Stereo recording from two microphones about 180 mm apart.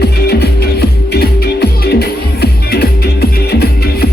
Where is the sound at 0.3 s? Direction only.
65° left (ahead or behind).